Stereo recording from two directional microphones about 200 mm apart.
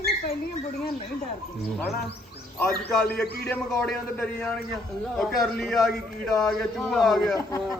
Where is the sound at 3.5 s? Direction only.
5° left (ahead or behind).